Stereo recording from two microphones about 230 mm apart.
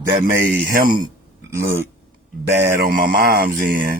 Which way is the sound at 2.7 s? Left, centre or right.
Right.